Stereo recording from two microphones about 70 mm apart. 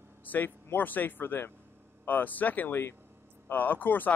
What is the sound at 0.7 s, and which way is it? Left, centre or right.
Speech, left.